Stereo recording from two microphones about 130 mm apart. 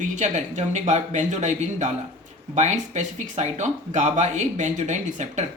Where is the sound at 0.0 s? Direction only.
65° right (ahead or behind).